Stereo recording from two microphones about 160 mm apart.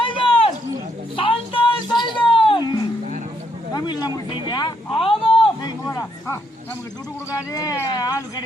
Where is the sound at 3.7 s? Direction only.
25° left (ahead or behind).